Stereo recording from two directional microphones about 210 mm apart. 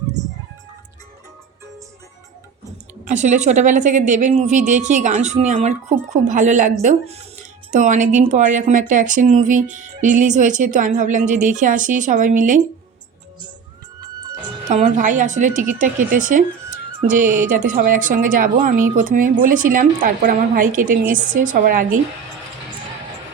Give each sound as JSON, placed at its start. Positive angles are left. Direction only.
{"t": 3.0, "sound": "a woman's voice", "side_deg": -35}
{"t": 14.7, "sound": "a woman's voice", "side_deg": -35}